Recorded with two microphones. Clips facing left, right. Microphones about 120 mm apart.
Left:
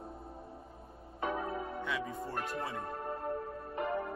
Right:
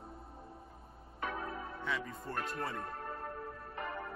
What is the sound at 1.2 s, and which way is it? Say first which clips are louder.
Music: left 4 dB; 25° left (ahead or behind).